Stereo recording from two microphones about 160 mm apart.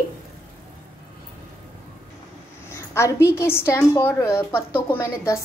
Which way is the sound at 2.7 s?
15° left (ahead or behind).